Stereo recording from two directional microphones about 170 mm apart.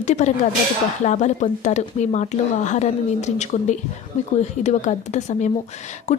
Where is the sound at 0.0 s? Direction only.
45° left (ahead or behind).